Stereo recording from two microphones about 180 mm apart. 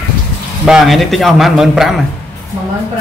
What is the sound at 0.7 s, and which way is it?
A man's voice, centre (ahead or behind).